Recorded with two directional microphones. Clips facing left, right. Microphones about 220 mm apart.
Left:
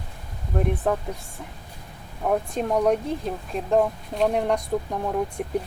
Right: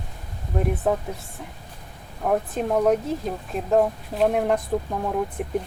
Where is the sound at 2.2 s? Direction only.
Centre (ahead or behind).